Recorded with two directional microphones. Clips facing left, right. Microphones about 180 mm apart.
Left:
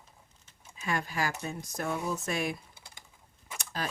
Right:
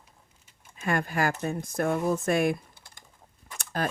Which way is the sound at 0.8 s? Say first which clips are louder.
Right 5 dB; 55° right (ahead or behind).